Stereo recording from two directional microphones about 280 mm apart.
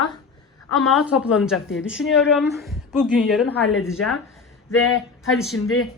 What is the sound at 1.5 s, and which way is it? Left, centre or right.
Speech, left.